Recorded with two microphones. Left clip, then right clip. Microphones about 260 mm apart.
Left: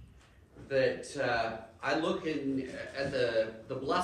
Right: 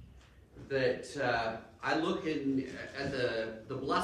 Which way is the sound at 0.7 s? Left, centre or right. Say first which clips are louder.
Left 2 dB; centre.